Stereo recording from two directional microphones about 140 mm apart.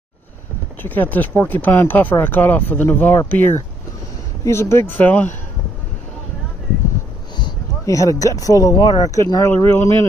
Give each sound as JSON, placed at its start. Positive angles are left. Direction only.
{"t": 0.8, "sound": "speech", "side_deg": 10}
{"t": 7.3, "sound": "speech", "side_deg": 25}